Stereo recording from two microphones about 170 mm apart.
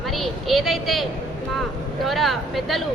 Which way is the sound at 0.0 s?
Centre (ahead or behind).